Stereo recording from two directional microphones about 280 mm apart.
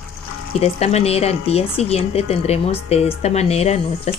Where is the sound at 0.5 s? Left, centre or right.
Left.